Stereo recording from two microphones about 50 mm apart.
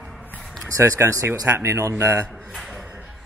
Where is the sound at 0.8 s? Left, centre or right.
Right.